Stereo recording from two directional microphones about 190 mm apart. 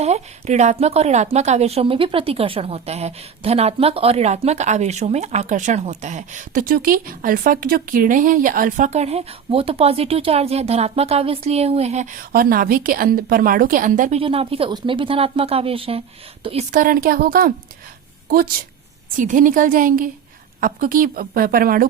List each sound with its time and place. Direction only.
0.0 s a woman's voice: 35° right (ahead or behind)
12.3 s a woman's voice: 50° right (ahead or behind)
14.2 s speech: 30° right (ahead or behind); by 17.5 s 50° right (ahead or behind)
19.1 s a woman's voice: 45° right (ahead or behind)